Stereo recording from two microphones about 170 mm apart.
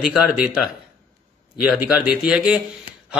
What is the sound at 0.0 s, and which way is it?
Speech, 10° right (ahead or behind).